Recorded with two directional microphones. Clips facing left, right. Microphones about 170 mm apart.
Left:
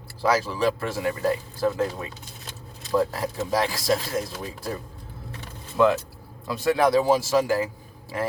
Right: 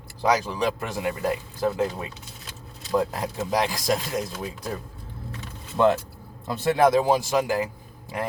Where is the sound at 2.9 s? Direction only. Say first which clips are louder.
Left 1 dB; 20° right (ahead or behind).